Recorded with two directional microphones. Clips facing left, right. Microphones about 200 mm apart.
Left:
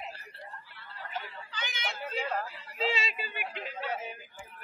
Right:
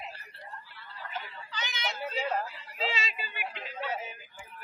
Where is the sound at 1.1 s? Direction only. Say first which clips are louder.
Even; 50° left (ahead or behind).